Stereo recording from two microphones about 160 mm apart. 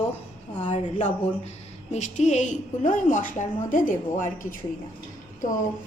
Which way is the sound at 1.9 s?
45° left (ahead or behind).